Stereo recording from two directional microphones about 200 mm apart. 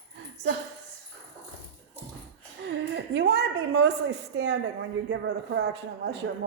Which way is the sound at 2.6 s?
60° right (ahead or behind).